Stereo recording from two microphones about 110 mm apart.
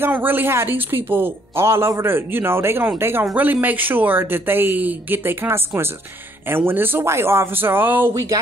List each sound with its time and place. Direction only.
0.0 s speech: 20° right (ahead or behind)